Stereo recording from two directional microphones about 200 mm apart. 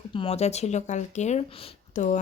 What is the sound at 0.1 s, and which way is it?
A woman's voice, 30° left (ahead or behind).